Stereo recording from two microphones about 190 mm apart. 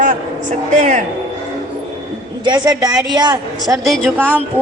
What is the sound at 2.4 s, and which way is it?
Speech, 20° right (ahead or behind).